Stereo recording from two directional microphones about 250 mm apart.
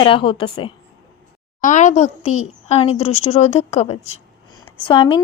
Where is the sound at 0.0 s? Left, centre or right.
Centre.